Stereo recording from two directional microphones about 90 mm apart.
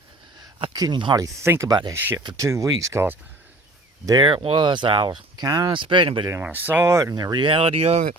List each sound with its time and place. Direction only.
0.7 s speech: 50° right (ahead or behind)
1.9 s speech: 25° right (ahead or behind)
2.1 s speech: 40° right (ahead or behind)
4.2 s speech: 60° right (ahead or behind)
6.5 s speech: 20° right (ahead or behind)
6.9 s speech: 35° right (ahead or behind)
7.2 s speech: 50° right (ahead or behind)
7.4 s speech: 85° right